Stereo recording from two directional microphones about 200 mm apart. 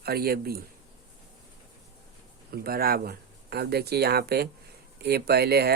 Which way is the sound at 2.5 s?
50° right (ahead or behind).